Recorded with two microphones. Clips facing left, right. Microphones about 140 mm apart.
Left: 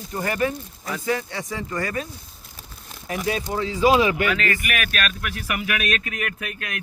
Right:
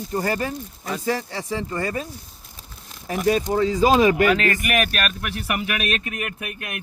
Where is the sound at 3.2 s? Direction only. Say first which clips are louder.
Right 6 dB; 40° right (ahead or behind).